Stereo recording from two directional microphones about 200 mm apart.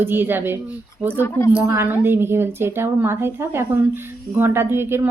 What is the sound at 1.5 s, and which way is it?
Speech, 10° right (ahead or behind).